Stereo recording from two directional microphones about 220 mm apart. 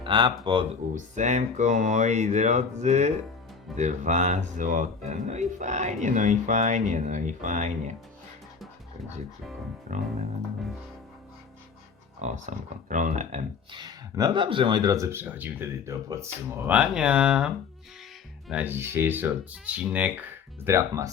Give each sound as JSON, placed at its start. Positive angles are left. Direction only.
{"t": 0.0, "sound": "speech", "side_deg": -20}
{"t": 0.9, "sound": "speech", "side_deg": -35}
{"t": 12.2, "sound": "speech", "side_deg": -35}
{"t": 13.7, "sound": "speech", "side_deg": -20}